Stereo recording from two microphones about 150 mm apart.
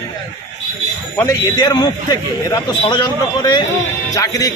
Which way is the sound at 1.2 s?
20° left (ahead or behind).